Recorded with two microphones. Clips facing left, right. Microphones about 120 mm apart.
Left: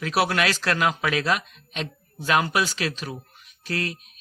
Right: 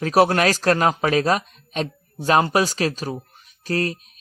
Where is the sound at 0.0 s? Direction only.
40° right (ahead or behind).